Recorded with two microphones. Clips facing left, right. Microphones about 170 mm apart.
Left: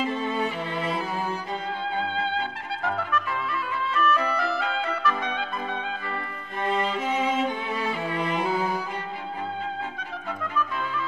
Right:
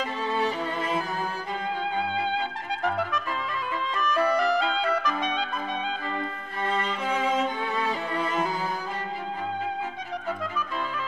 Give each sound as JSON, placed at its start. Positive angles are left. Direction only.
{"t": 3.9, "sound": "music", "side_deg": -15}
{"t": 7.9, "sound": "music", "side_deg": -40}